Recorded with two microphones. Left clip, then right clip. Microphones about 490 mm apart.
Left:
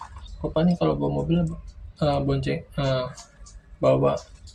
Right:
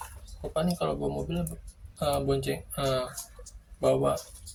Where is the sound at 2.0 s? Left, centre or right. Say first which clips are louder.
Left 3 dB; right.